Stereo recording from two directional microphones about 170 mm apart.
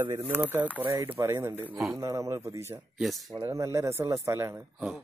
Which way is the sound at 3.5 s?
20° right (ahead or behind).